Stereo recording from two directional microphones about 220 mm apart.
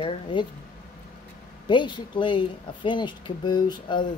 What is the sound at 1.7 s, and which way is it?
Speech, 20° left (ahead or behind).